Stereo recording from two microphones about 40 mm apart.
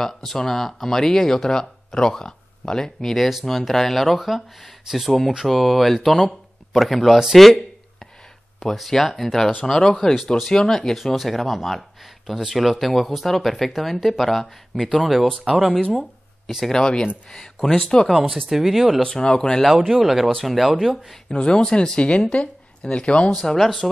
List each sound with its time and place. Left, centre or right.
0.0 s speech: centre
8.7 s speech: centre
11.1 s speech: centre
16.0 s a sound: centre
16.7 s speech: centre
18.2 s speech: centre
19.0 s speech: centre
19.9 s speech: centre
21.3 s speech: left
23.3 s speech: centre